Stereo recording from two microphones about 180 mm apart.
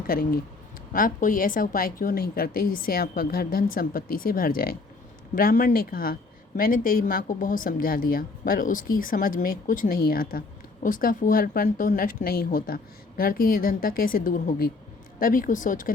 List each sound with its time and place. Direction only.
0.1 s speech: 55° left (ahead or behind)